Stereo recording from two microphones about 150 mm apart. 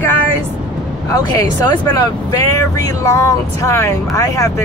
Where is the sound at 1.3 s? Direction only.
25° left (ahead or behind).